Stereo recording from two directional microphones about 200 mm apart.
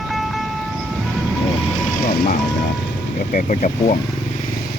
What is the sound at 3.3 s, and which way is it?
Speech, 40° left (ahead or behind).